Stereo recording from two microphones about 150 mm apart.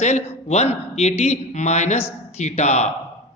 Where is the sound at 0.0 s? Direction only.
50° left (ahead or behind).